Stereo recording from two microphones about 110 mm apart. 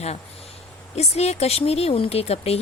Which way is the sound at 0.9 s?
75° left (ahead or behind).